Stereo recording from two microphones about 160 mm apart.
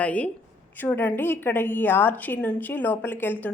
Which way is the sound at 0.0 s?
10° left (ahead or behind).